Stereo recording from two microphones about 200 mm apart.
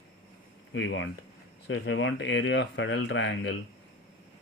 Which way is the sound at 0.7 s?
70° left (ahead or behind).